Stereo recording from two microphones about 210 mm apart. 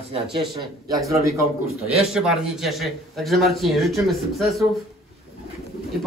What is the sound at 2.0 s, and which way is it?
A man's voice, centre (ahead or behind).